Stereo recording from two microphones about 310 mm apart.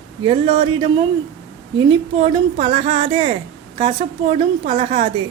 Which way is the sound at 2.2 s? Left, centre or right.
Centre.